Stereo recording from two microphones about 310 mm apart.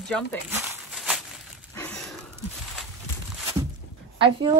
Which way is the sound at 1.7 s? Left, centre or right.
Centre.